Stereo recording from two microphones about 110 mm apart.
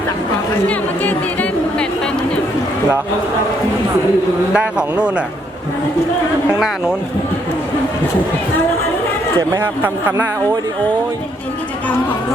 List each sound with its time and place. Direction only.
0.7 s music: 10° left (ahead or behind)
4.5 s a man's voice: 10° right (ahead or behind)
6.5 s a man's voice: 5° right (ahead or behind)
9.4 s speech: 30° right (ahead or behind)
9.8 s speech: 20° right (ahead or behind)